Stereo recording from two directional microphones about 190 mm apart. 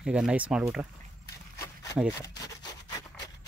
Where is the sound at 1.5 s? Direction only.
15° left (ahead or behind).